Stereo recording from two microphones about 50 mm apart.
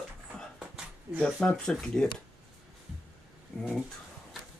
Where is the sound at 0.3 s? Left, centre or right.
Centre.